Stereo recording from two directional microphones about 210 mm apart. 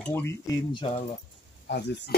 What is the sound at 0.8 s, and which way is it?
Speech, 30° left (ahead or behind).